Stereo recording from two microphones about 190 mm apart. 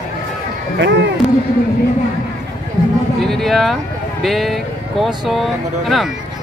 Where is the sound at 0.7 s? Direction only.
65° right (ahead or behind).